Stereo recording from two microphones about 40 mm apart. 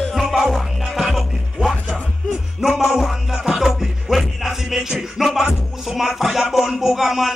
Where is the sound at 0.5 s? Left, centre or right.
Centre.